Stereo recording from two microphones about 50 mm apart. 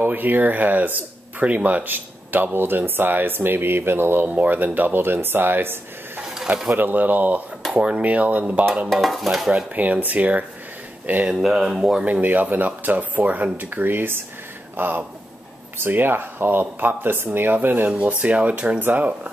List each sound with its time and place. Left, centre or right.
0.0 s speech: right
4.3 s speech: right
6.2 s snake: centre
6.8 s speech: right
8.8 s stir: centre
9.8 s speech: right
11.3 s speech: centre
11.7 s stir: centre
12.0 s speech: right
17.8 s speech: right